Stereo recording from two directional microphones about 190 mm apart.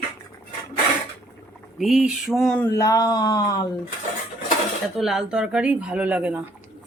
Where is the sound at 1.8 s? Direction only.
Centre (ahead or behind); by 3.6 s 20° left (ahead or behind).